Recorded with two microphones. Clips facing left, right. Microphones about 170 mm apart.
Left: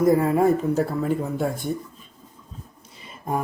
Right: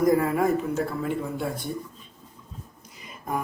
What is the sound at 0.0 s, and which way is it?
Speech, 25° left (ahead or behind).